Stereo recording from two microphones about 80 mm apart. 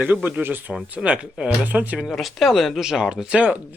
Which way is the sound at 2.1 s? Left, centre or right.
Centre.